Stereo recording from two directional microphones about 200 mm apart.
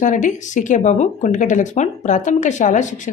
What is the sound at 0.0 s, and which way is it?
A woman's voice, 40° left (ahead or behind).